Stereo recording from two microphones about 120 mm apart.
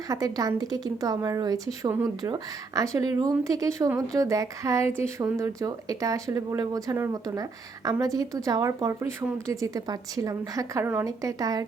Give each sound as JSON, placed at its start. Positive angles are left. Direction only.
{"t": 0.1, "sound": "a woman's voice", "side_deg": -30}